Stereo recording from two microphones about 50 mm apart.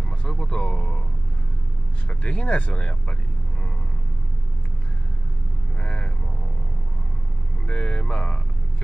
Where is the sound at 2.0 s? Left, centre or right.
Left.